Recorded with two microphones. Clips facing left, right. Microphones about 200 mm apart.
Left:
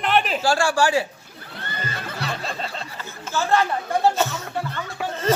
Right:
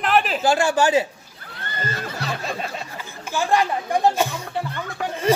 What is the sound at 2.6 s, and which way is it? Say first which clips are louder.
Speech: right 1 dB; 10° right (ahead or behind).